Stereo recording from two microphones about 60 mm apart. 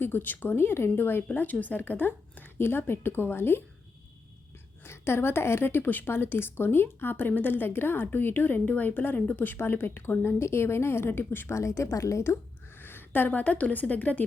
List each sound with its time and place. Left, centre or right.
0.0 s a woman's voice: left
1.4 s a woman's voice: left
4.8 s a woman's voice: left
11.4 s a woman's voice: left
12.7 s a woman's voice: left